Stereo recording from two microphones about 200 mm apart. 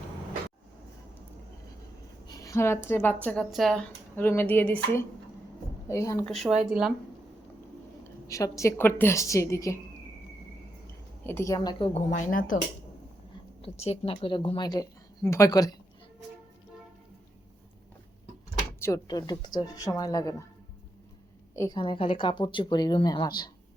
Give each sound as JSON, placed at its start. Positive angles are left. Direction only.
{"t": 2.2, "sound": "a woman's voice", "side_deg": 15}
{"t": 6.2, "sound": "speech", "side_deg": 0}
{"t": 8.3, "sound": "a woman's voice", "side_deg": 15}
{"t": 11.2, "sound": "a woman's voice", "side_deg": 10}
{"t": 12.1, "sound": "speech", "side_deg": 45}
{"t": 13.6, "sound": "a woman's voice", "side_deg": 30}
{"t": 18.8, "sound": "a woman's voice", "side_deg": 15}
{"t": 21.5, "sound": "a woman's voice", "side_deg": 15}